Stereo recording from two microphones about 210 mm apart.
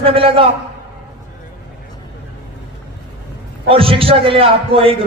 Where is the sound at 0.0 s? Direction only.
25° right (ahead or behind).